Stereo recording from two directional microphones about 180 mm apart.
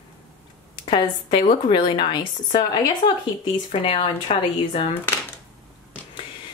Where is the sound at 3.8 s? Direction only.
30° left (ahead or behind).